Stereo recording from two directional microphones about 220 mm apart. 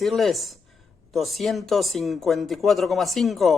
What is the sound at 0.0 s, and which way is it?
A man's voice, centre (ahead or behind).